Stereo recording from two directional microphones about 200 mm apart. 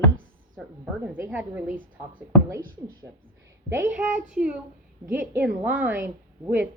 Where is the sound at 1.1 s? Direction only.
10° right (ahead or behind).